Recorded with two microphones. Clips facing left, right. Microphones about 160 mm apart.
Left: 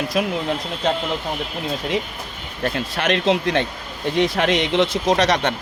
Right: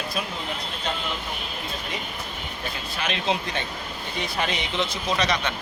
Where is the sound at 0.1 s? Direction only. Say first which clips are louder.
Left 11 dB; 80° left.